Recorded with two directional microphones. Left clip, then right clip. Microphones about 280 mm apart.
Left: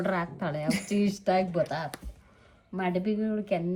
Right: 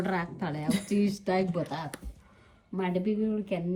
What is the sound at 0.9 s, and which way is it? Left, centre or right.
Speech, left.